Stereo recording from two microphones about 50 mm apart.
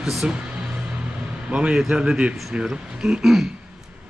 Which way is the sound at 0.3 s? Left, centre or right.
Right.